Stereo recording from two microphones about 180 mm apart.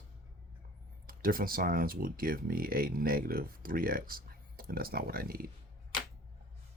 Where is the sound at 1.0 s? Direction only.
55° right (ahead or behind).